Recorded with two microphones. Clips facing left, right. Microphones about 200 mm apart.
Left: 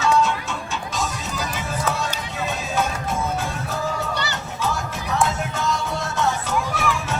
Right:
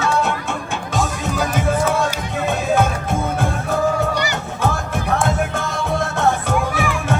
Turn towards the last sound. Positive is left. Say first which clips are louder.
# right 4 dB
turn(degrees=-55)  # may be behind; listen again after turning